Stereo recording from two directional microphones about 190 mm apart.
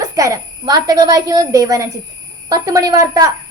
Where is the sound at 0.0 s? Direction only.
20° right (ahead or behind).